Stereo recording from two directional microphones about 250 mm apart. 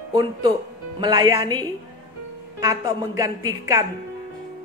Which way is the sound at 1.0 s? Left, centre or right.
Centre.